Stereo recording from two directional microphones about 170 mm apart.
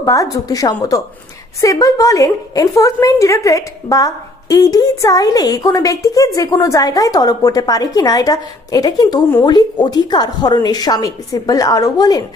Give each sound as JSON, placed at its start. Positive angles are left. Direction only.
{"t": 0.0, "sound": "a woman's voice", "side_deg": 20}